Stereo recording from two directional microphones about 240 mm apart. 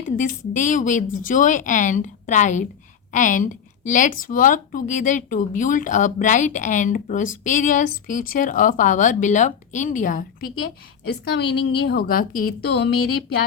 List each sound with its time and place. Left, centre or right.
0.0 s speech: left
11.1 s a woman's voice: left